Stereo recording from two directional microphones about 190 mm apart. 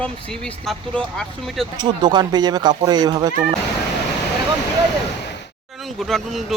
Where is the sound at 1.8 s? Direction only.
20° right (ahead or behind).